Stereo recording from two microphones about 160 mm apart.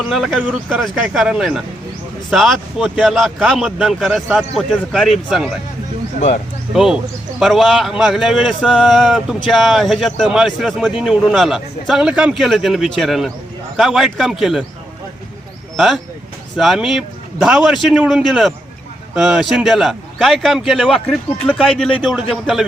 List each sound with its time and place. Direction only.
0.1 s speech: centre (ahead or behind)
6.1 s speech: 45° left (ahead or behind)
6.7 s speech: centre (ahead or behind)
15.7 s speech: centre (ahead or behind)